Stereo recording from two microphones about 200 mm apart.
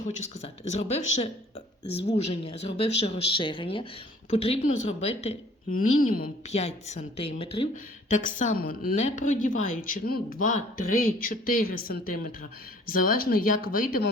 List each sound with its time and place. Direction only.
0.0 s a woman's voice: 35° left (ahead or behind)
5.7 s speech: 45° left (ahead or behind)
6.5 s a woman's voice: 30° left (ahead or behind)
8.1 s a woman's voice: 40° left (ahead or behind)